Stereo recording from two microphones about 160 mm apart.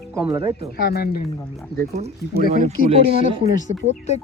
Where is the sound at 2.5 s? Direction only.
40° right (ahead or behind).